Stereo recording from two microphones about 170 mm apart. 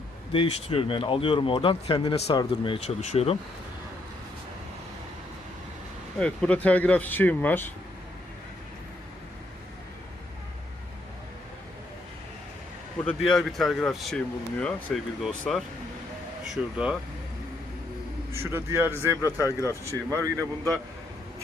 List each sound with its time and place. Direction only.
0.3 s speech: 30° left (ahead or behind)
6.1 s speech: 5° left (ahead or behind)
13.3 s speech: centre (ahead or behind)
18.3 s a man's voice: 15° right (ahead or behind)
19.2 s speech: 20° left (ahead or behind)
20.1 s speech: 20° right (ahead or behind)